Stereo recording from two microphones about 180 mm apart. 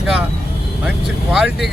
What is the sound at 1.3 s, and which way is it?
Speech, centre (ahead or behind).